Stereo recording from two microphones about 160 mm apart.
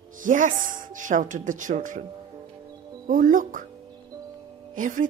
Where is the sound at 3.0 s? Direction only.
55° right (ahead or behind).